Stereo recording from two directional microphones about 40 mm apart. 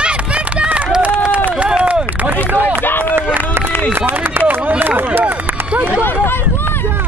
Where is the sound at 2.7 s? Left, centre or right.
Left.